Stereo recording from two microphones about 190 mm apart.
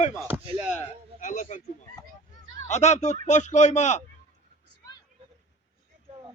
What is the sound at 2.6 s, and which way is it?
A man's voice, 40° left (ahead or behind).